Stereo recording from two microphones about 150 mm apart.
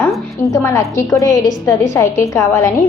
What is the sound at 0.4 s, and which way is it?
A woman's voice, 20° left (ahead or behind).